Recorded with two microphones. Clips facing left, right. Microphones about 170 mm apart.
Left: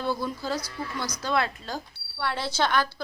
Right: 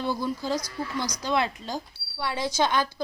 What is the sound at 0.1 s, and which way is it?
A woman's voice, 15° right (ahead or behind).